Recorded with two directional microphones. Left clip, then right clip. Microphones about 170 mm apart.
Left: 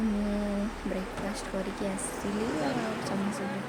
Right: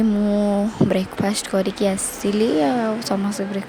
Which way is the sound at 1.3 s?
55° right (ahead or behind).